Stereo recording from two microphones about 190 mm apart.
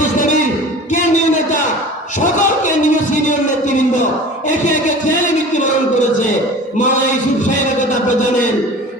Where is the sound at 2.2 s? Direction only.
40° left (ahead or behind).